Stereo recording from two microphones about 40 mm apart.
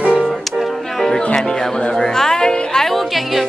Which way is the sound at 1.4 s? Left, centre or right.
Centre.